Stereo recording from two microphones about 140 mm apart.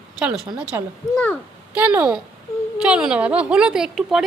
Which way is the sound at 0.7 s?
20° right (ahead or behind).